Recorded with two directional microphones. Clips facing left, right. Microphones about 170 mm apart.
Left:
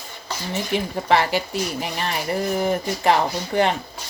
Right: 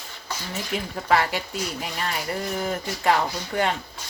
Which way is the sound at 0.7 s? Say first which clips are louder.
Left 3 dB; 25° left (ahead or behind).